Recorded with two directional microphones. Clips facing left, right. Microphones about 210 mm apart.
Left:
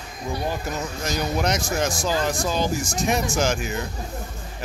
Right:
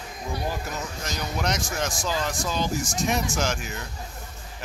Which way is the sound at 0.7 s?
5° left (ahead or behind).